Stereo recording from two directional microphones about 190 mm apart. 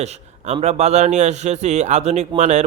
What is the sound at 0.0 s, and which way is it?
A man's voice, 35° right (ahead or behind).